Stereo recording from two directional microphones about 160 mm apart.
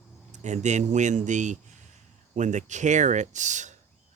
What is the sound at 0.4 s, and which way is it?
Speech, 45° right (ahead or behind).